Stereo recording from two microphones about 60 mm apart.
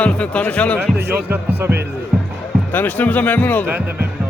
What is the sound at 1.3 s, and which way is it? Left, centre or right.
Speech, right.